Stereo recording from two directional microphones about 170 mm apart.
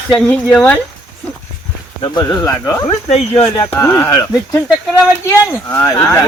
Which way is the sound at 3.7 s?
15° left (ahead or behind).